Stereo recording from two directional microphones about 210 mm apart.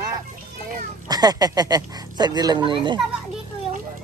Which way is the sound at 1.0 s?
20° right (ahead or behind).